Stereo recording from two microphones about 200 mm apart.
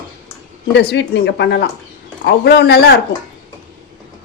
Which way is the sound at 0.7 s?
60° left (ahead or behind).